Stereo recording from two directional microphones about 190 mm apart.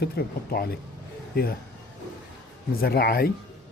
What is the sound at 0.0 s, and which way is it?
Speech, 55° left (ahead or behind).